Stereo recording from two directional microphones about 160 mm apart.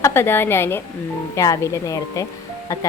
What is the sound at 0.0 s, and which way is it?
A woman's voice, 15° left (ahead or behind).